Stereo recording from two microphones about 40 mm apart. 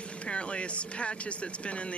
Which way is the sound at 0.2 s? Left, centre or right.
Left.